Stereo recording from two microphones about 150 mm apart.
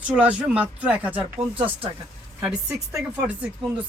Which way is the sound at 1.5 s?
35° right (ahead or behind).